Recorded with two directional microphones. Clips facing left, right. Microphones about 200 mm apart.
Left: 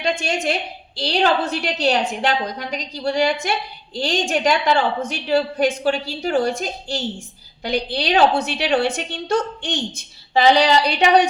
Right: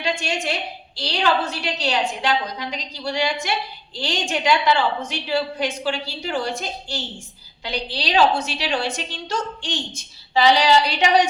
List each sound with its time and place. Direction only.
0.9 s a woman's voice: 55° left (ahead or behind)